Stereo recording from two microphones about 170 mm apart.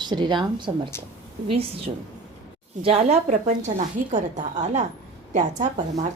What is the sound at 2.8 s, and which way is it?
A woman's voice, 35° right (ahead or behind).